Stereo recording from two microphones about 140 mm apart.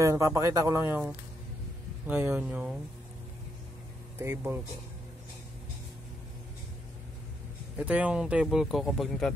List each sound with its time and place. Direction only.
0.0 s speech: 20° right (ahead or behind)
4.2 s speech: 15° right (ahead or behind)
7.7 s speech: 10° right (ahead or behind)